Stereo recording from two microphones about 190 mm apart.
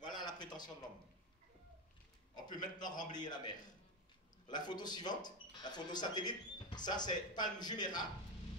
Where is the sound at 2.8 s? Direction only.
45° left (ahead or behind).